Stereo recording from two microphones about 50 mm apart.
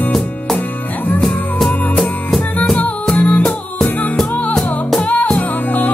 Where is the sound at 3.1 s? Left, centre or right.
Left.